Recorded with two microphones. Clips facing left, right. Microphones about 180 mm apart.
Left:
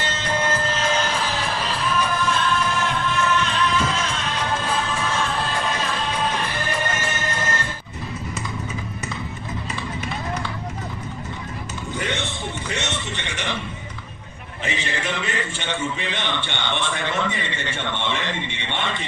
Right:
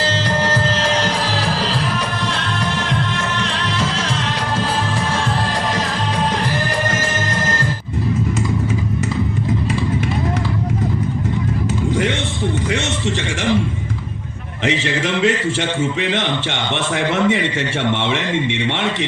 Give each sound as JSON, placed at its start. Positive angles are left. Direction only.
{"t": 0.0, "sound": "music", "side_deg": -80}
{"t": 6.9, "sound": "music", "side_deg": -90}
{"t": 12.7, "sound": "a sound", "side_deg": -90}
{"t": 14.6, "sound": "a man's voice", "side_deg": -90}